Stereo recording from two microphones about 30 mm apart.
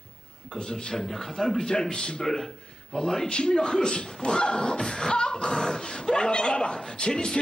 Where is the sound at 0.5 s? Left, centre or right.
Left.